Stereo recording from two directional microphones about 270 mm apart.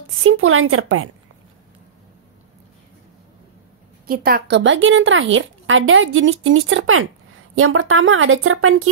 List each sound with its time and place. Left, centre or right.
0.2 s a woman's voice: right
4.1 s a woman's voice: right